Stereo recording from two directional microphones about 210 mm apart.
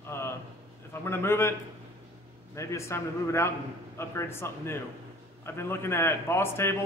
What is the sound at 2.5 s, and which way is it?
A man's voice, 15° left (ahead or behind).